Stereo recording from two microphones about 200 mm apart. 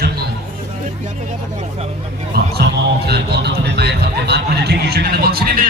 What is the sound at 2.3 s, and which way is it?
Speech, 50° right (ahead or behind).